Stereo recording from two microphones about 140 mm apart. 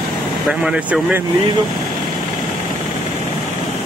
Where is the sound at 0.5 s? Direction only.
5° right (ahead or behind).